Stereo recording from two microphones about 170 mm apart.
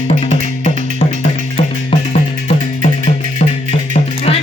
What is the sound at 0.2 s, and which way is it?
Music, 45° left (ahead or behind).